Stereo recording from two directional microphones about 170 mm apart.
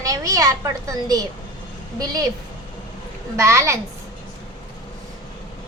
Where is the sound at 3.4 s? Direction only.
15° right (ahead or behind).